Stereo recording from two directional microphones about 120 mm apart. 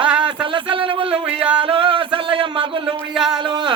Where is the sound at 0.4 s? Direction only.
45° right (ahead or behind).